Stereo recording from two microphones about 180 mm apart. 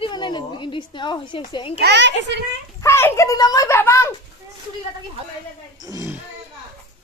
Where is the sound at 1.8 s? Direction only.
75° right (ahead or behind).